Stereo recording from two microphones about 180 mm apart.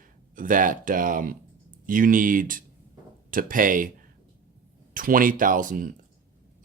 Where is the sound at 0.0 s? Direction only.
50° right (ahead or behind).